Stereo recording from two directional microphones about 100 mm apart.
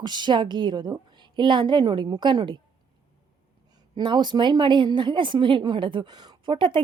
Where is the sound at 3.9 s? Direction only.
50° right (ahead or behind).